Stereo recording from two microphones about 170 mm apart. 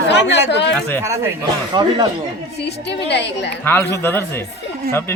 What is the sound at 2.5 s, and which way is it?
A woman's voice, 80° left.